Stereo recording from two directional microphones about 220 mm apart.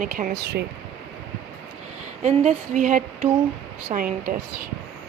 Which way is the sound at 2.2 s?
30° right (ahead or behind).